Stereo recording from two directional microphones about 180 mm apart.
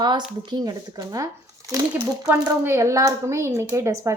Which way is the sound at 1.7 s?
20° right (ahead or behind).